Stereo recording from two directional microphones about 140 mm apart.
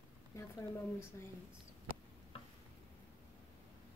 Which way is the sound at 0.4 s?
20° left (ahead or behind).